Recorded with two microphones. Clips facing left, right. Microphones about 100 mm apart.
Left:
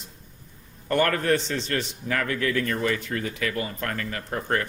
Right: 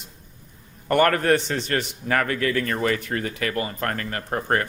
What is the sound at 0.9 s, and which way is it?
A man's voice, 70° right (ahead or behind).